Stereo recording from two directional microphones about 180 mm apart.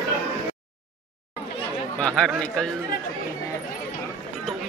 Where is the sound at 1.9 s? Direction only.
5° left (ahead or behind).